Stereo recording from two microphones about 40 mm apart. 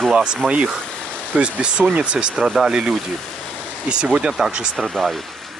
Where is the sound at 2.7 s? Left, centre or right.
Right.